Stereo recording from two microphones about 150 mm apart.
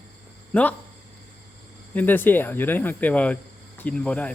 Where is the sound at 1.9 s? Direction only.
10° left (ahead or behind).